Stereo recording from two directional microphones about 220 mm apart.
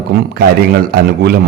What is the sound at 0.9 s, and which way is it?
Speech, 45° right (ahead or behind).